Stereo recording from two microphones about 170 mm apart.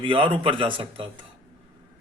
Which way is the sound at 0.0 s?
30° right (ahead or behind).